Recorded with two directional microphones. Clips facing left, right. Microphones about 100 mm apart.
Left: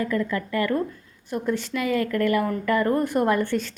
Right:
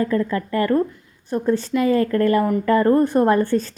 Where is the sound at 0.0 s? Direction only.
35° right (ahead or behind).